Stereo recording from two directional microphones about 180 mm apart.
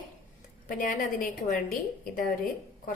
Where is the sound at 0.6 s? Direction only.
50° left (ahead or behind).